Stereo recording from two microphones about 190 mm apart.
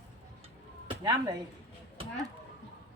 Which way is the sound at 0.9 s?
20° right (ahead or behind).